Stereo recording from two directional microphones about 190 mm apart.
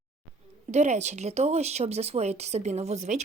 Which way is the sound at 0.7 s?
35° right (ahead or behind).